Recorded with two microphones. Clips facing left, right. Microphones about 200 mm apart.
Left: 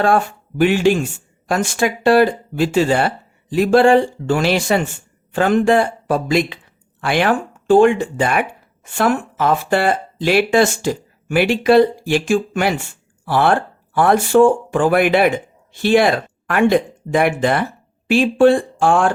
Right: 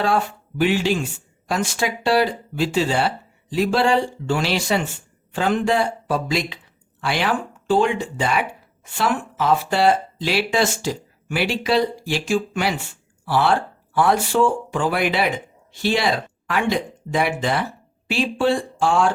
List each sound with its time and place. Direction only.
0.0 s speech: 50° left (ahead or behind)